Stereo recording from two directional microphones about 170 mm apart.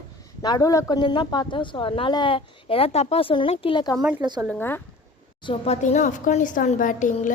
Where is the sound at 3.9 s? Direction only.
5° right (ahead or behind).